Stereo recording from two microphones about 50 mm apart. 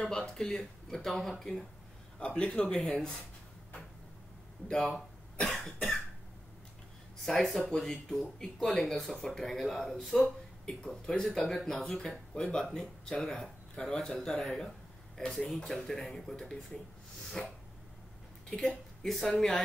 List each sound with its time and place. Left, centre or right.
0.0 s speech: centre
2.1 s speech: left
4.6 s speech: centre
7.2 s speech: centre
13.7 s speech: centre